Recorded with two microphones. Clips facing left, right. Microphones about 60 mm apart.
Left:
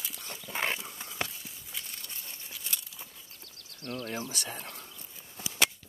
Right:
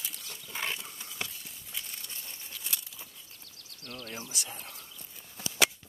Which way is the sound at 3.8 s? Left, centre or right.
Left.